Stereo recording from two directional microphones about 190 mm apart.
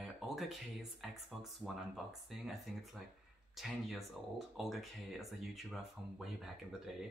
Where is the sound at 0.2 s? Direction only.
Centre (ahead or behind).